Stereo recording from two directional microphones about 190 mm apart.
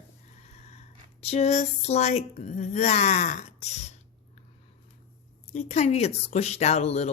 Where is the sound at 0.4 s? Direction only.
35° left (ahead or behind).